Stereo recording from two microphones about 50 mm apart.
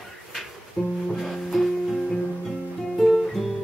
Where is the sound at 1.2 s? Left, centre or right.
Centre.